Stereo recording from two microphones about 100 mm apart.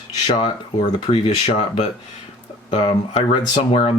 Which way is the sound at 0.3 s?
60° left (ahead or behind).